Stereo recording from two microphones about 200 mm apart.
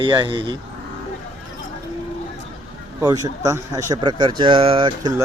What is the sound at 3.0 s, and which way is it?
Speech, 20° right (ahead or behind).